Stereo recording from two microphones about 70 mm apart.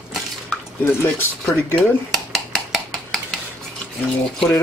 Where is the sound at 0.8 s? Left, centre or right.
Left.